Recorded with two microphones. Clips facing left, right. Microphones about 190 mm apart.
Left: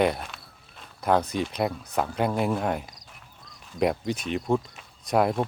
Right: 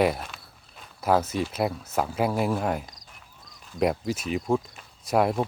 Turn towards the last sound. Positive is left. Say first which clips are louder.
# even
turn(degrees=0)  # may be behind; listen again after turning